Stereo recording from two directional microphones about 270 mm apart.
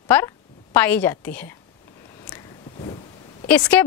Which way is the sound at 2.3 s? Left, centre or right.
Centre.